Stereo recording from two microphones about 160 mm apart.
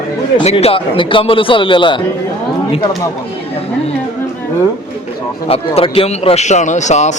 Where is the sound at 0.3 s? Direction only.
35° left (ahead or behind).